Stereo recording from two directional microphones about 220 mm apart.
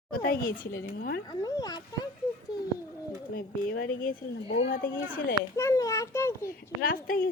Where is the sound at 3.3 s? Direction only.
40° left (ahead or behind).